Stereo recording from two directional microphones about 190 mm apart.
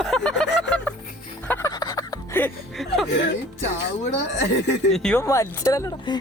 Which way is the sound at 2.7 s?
Centre (ahead or behind).